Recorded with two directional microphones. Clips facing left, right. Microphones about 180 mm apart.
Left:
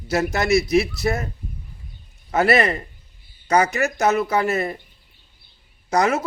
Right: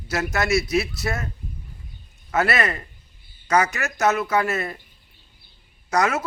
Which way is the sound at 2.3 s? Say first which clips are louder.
Left 4 dB; 35° left (ahead or behind).